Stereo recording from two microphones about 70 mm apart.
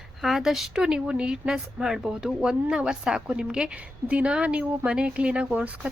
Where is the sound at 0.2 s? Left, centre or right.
Centre.